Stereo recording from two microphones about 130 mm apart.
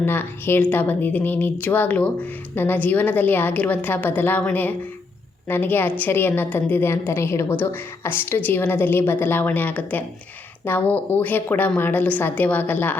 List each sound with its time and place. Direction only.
0.0 s speech: 15° left (ahead or behind)